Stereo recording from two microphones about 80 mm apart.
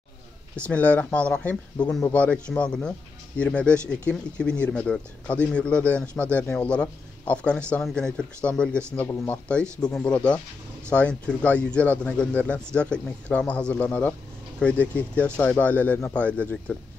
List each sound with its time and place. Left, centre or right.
0.7 s speech: centre
9.0 s speech: left
9.3 s speech: centre